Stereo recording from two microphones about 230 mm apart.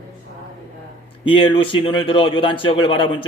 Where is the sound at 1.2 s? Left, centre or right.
Left.